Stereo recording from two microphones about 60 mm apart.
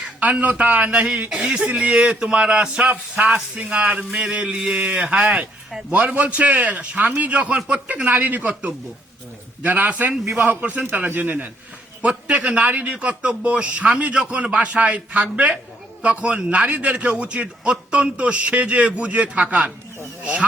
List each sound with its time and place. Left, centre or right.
0.2 s a man's voice: right
3.2 s a man's voice: centre
3.6 s a man's voice: right